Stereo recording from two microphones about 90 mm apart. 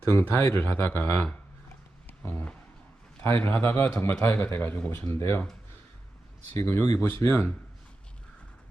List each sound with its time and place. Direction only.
0.1 s a man's voice: 25° left (ahead or behind)
3.2 s a man's voice: 25° left (ahead or behind)
6.6 s a man's voice: 25° left (ahead or behind)